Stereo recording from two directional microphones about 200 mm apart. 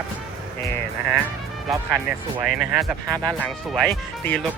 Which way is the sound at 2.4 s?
5° right (ahead or behind).